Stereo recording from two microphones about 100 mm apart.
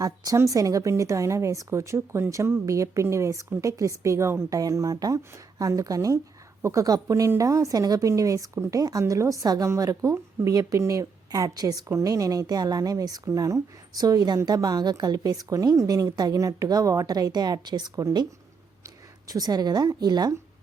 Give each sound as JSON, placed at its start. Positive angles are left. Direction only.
{"t": 0.3, "sound": "a woman's voice", "side_deg": -35}
{"t": 19.3, "sound": "a woman's voice", "side_deg": -40}